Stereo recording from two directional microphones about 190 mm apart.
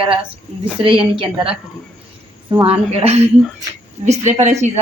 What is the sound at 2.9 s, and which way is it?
A woman's voice, 35° right (ahead or behind).